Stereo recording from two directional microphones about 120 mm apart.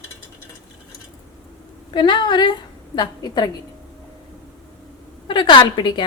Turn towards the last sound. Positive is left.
turn(degrees=40)  # may be behind; listen again after turning